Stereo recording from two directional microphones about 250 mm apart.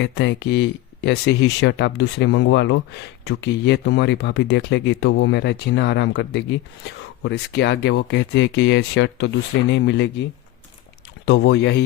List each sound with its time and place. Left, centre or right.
0.0 s speech: left
11.3 s speech: left